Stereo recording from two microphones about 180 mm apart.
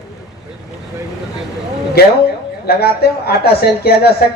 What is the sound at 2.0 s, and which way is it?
Speech, 60° left (ahead or behind).